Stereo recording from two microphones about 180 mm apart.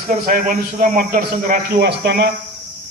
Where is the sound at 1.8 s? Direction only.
65° right (ahead or behind).